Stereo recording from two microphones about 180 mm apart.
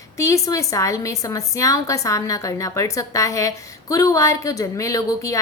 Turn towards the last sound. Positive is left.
turn(degrees=15)  # may be behind; listen again after turning